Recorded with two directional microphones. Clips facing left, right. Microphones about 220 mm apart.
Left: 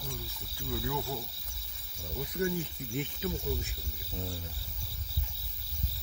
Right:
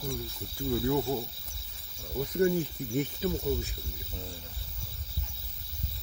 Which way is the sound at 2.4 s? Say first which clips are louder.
Right 6 dB; 45° right (ahead or behind).